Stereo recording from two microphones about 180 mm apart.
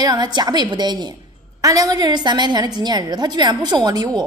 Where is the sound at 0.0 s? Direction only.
25° right (ahead or behind).